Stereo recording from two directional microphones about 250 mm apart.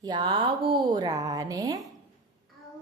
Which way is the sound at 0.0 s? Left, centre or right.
Centre.